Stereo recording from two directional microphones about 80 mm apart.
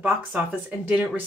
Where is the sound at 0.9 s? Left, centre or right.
Centre.